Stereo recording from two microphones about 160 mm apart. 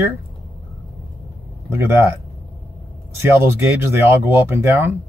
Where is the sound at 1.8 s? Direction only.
15° right (ahead or behind).